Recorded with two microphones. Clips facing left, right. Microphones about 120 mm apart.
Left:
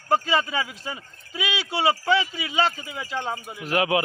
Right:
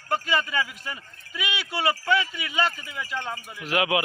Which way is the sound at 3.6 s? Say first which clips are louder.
Left 2 dB; 35° left (ahead or behind).